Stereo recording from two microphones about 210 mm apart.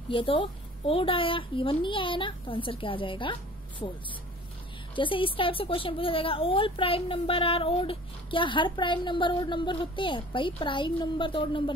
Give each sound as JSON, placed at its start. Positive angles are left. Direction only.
{"t": 0.1, "sound": "a woman's voice", "side_deg": 25}
{"t": 4.9, "sound": "a woman's voice", "side_deg": 25}